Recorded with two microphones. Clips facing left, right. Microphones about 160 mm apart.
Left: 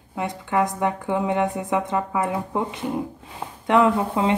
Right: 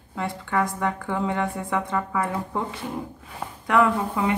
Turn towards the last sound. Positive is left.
turn(degrees=20)  # may be behind; listen again after turning